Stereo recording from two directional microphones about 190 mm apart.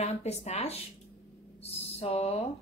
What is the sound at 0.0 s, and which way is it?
Speech, 35° left (ahead or behind).